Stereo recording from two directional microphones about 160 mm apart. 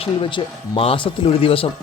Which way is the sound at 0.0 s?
30° left (ahead or behind).